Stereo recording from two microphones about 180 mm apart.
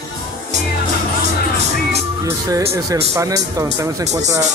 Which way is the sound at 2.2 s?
15° right (ahead or behind).